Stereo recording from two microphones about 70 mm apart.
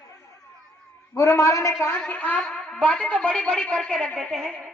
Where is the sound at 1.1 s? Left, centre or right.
Left.